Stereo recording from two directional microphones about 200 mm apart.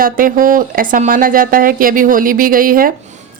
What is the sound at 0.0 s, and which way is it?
A woman's voice, 45° right (ahead or behind).